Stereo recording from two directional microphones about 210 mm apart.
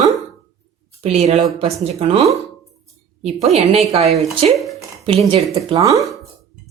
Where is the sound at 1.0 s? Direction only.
30° right (ahead or behind).